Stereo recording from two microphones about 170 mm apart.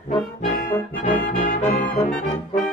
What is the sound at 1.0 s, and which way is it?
Brass instrument, 50° left (ahead or behind).